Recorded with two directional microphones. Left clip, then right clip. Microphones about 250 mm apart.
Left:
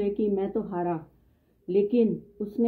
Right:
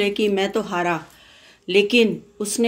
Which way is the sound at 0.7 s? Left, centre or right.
Centre.